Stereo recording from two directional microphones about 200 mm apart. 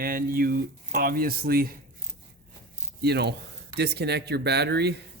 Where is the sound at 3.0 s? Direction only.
55° right (ahead or behind).